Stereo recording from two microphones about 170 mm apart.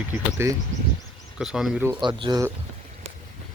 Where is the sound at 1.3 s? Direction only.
5° right (ahead or behind).